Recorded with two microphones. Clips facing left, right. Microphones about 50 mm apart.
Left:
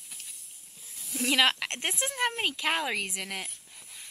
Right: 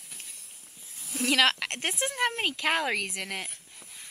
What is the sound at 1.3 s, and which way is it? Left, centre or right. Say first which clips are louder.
Speech: right 1 dB; centre.